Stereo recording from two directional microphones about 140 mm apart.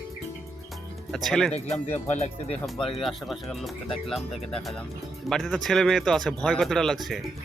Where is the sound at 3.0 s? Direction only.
Centre (ahead or behind).